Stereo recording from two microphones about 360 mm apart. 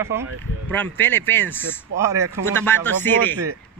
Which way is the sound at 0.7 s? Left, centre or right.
Centre.